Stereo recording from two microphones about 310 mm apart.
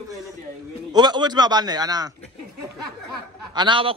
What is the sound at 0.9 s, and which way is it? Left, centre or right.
A man's voice, centre.